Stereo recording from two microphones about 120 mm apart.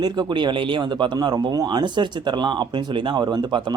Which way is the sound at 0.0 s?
35° right (ahead or behind).